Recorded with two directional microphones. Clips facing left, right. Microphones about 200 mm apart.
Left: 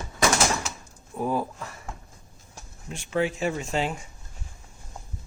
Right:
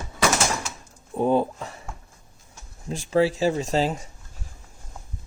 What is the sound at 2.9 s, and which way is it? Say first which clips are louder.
Speech: right 5 dB; 35° right (ahead or behind).